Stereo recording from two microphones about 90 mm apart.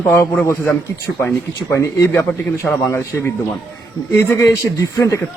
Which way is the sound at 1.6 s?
30° left (ahead or behind).